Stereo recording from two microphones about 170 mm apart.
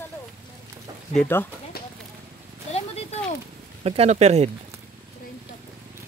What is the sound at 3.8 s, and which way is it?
Speech, 35° right (ahead or behind).